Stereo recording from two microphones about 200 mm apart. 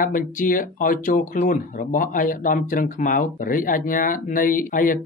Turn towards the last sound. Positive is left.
turn(degrees=45)  # may be behind; listen again after turning